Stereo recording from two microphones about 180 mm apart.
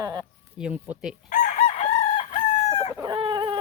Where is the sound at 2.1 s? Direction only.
35° left (ahead or behind).